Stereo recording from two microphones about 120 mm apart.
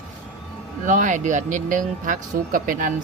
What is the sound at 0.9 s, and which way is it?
Speech, 90° right.